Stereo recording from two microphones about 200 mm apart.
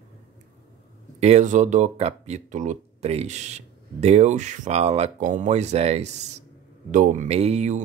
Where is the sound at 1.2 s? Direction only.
35° right (ahead or behind).